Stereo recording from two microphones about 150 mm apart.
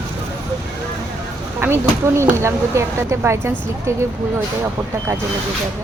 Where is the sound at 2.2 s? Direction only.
20° right (ahead or behind).